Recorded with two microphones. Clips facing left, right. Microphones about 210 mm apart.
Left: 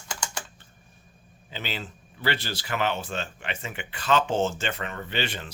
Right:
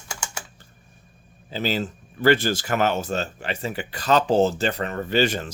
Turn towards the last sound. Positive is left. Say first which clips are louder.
# right 10 dB
turn(degrees=-45)  # may be behind; listen again after turning